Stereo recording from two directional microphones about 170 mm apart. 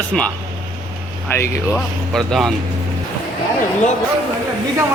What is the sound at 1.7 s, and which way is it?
Speech, centre (ahead or behind).